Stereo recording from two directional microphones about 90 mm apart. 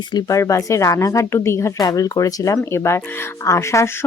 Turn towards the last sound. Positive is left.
turn(degrees=35)  # may be behind; listen again after turning